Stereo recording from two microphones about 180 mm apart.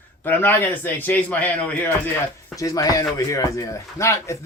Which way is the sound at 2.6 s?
20° left (ahead or behind).